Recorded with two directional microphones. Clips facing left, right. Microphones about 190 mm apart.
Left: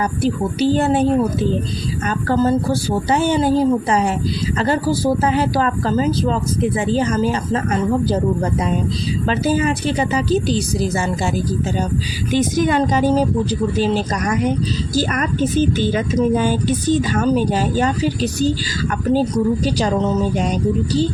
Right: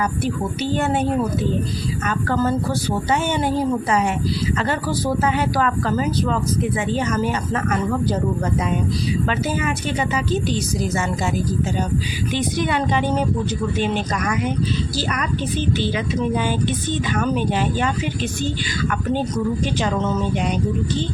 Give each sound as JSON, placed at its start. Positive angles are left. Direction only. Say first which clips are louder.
{"t": 0.2, "sound": "speech", "louder": "left 5 dB", "side_deg": 30}
{"t": 2.0, "sound": "speech", "louder": "left 4 dB", "side_deg": 30}
{"t": 9.2, "sound": "speech", "louder": "left 9 dB", "side_deg": 35}
{"t": 12.3, "sound": "speech", "louder": "left 6 dB", "side_deg": 45}
{"t": 14.9, "sound": "speech", "louder": "left 5 dB", "side_deg": 45}